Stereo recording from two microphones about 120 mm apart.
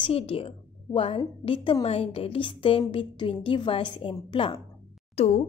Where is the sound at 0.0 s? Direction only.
50° left (ahead or behind).